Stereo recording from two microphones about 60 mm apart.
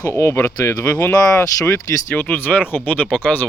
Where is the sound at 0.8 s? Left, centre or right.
Left.